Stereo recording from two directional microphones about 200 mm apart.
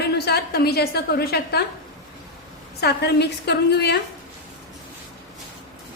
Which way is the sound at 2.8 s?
55° left (ahead or behind).